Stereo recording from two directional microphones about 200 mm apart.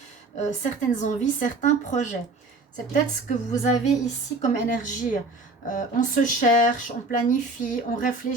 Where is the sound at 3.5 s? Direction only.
35° left (ahead or behind).